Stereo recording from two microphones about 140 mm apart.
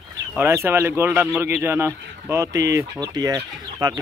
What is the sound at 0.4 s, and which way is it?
Speech, 15° right (ahead or behind).